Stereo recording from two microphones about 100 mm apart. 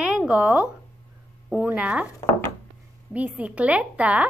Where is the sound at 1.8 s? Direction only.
15° right (ahead or behind).